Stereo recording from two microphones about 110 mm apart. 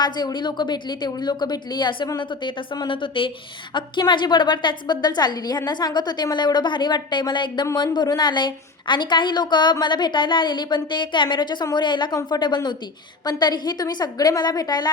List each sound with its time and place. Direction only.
0.0 s a woman's voice: 40° left (ahead or behind)